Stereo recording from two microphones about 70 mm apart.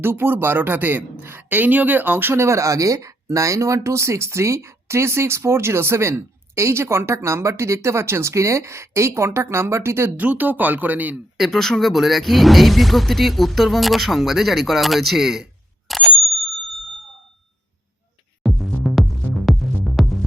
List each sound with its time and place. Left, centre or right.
0.0 s a man's voice: right
10.2 s speech: right
11.3 s speech: centre
15.9 s bicycle bell: centre
18.4 s music: centre